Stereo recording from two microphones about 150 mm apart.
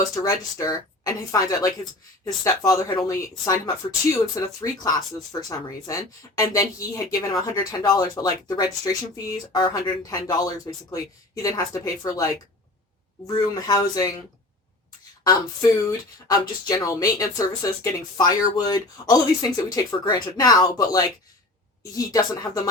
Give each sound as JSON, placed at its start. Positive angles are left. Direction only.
{"t": 0.1, "sound": "speech", "side_deg": 20}
{"t": 15.9, "sound": "speech", "side_deg": 25}